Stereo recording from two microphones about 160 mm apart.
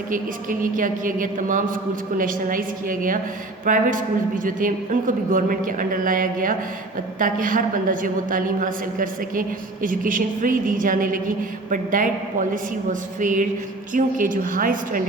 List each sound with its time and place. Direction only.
0.1 s a woman's voice: 60° right (ahead or behind)